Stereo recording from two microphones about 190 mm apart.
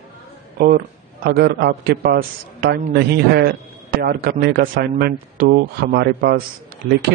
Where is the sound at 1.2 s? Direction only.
55° right (ahead or behind).